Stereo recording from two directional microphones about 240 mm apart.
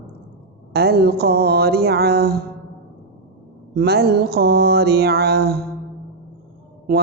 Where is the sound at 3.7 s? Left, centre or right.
Right.